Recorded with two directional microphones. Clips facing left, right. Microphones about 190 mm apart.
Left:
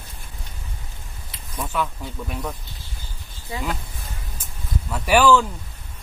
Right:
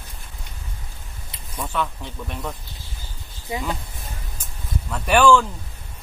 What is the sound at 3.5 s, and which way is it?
Speech, 20° right (ahead or behind).